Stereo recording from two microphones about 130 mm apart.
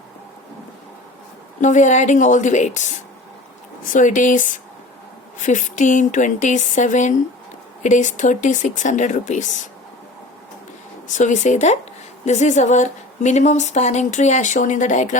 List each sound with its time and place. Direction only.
1.6 s speech: 70° left (ahead or behind)
3.8 s speech: 80° left
11.1 s a woman's voice: 65° left (ahead or behind)